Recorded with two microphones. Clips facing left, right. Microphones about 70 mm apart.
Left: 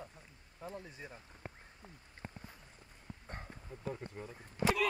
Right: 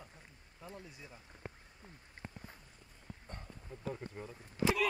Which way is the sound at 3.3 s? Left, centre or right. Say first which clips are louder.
Left 4 dB; left.